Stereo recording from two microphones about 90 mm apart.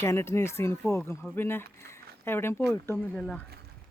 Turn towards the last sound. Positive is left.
turn(degrees=10)  # may be behind; listen again after turning